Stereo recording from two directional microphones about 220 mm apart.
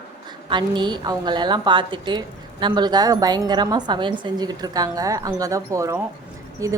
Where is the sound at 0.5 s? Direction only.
20° right (ahead or behind).